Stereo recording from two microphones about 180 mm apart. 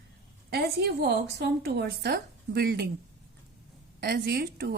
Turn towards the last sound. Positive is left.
turn(degrees=-60)  # may be behind; listen again after turning